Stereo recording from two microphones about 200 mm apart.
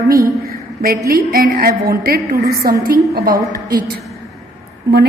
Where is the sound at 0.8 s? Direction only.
45° right (ahead or behind).